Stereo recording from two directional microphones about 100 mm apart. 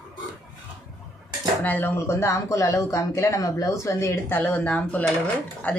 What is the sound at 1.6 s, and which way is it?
Speech, 20° left (ahead or behind).